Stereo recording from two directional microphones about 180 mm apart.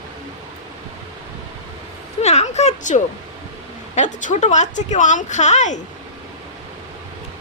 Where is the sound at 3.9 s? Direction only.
40° left (ahead or behind).